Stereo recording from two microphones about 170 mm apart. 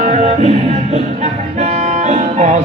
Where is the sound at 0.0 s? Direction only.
40° right (ahead or behind).